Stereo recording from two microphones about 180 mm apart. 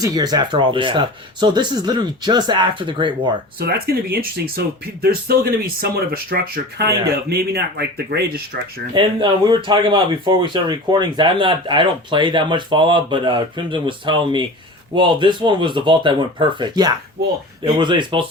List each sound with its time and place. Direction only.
0.0 s speech: 20° right (ahead or behind)
3.6 s speech: 60° right (ahead or behind)
9.0 s speech: 25° right (ahead or behind)